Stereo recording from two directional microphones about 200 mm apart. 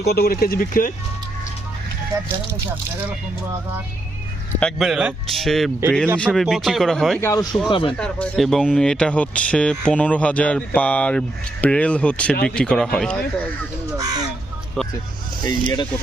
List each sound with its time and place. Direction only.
0.0 s speech: 50° left (ahead or behind)
4.6 s speech: centre (ahead or behind)
7.2 s speech: 15° left (ahead or behind)
7.7 s speech: 25° left (ahead or behind)
7.9 s speech: 5° left (ahead or behind)
13.9 s speech: 20° right (ahead or behind)
14.8 s vehicle: 5° left (ahead or behind)
15.4 s speech: 20° left (ahead or behind)